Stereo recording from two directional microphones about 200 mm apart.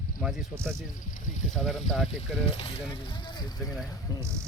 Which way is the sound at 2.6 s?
25° left (ahead or behind).